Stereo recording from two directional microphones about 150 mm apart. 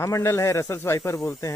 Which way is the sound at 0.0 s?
20° left (ahead or behind).